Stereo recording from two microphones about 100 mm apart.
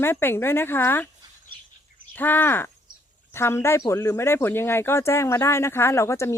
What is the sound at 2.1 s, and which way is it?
Speech, 20° left (ahead or behind).